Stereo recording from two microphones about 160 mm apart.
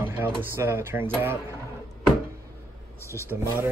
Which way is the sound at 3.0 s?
15° left (ahead or behind).